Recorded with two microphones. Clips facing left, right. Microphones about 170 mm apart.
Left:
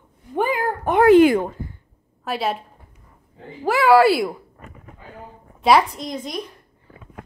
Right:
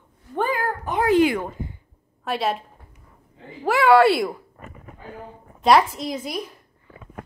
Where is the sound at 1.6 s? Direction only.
20° right (ahead or behind).